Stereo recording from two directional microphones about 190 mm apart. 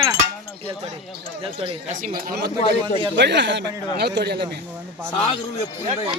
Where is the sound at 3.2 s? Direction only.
70° right (ahead or behind).